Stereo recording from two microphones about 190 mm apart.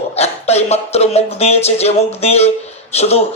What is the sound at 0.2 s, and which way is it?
Speech, 35° left (ahead or behind).